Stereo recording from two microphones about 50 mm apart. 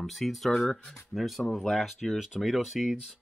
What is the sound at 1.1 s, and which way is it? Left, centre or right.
Speech, centre.